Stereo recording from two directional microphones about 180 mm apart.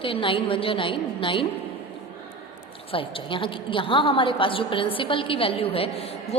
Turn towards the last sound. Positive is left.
turn(degrees=35)  # may be behind; listen again after turning